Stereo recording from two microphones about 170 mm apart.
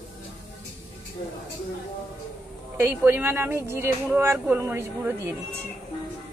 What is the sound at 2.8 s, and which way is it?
Speech, 10° right (ahead or behind).